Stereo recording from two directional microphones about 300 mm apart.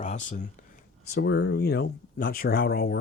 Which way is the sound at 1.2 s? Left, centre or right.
Left.